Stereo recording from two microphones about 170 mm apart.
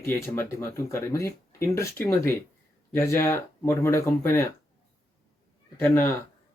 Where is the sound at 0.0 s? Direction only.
15° left (ahead or behind).